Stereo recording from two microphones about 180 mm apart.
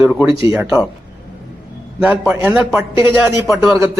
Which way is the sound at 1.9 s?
10° right (ahead or behind).